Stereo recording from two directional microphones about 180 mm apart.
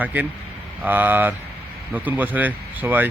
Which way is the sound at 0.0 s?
10° right (ahead or behind).